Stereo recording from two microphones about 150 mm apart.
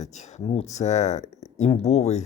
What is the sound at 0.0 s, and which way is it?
Speech, 50° left (ahead or behind).